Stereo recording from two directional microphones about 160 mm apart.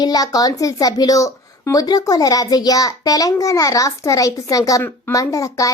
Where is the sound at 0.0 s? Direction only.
25° left (ahead or behind).